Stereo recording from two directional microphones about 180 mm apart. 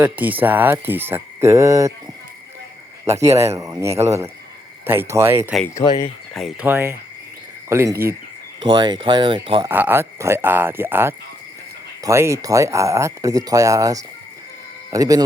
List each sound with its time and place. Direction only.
0.0 s speech: 10° right (ahead or behind)
3.1 s speech: 15° right (ahead or behind)
5.7 s speech: 25° left (ahead or behind)
6.3 s speech: centre (ahead or behind)
6.7 s speech: 10° right (ahead or behind)
8.6 s speech: 25° right (ahead or behind)
9.6 s speech: 10° right (ahead or behind)